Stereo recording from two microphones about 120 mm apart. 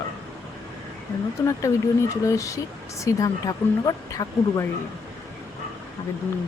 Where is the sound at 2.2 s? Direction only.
25° left (ahead or behind).